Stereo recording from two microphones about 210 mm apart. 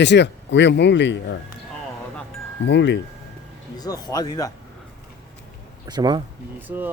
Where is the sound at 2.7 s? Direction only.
55° left (ahead or behind).